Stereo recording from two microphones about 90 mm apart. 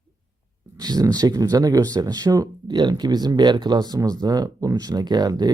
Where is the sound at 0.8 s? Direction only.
45° right (ahead or behind).